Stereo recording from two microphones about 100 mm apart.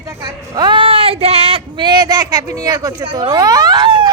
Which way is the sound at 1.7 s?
50° right (ahead or behind).